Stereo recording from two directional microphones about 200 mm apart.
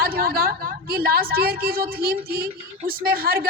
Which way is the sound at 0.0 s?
50° right (ahead or behind).